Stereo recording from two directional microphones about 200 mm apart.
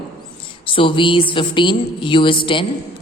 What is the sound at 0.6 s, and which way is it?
A woman's voice, 25° left (ahead or behind).